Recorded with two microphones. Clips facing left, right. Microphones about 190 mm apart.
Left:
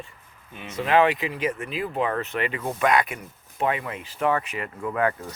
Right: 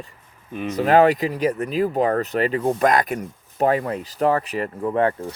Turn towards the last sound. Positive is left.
turn(degrees=-30)  # may be behind; listen again after turning